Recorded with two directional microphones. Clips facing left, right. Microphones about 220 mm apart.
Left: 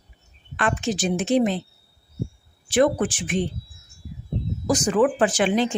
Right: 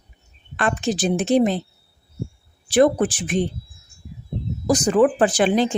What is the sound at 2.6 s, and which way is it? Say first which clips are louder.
Speech: right 3 dB; 35° right (ahead or behind).